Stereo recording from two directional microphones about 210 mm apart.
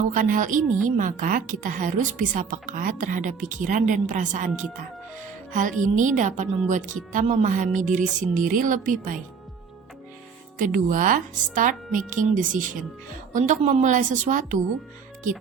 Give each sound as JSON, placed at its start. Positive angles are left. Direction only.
{"t": 0.1, "sound": "a woman's voice", "side_deg": -40}
{"t": 10.6, "sound": "a woman's voice", "side_deg": -40}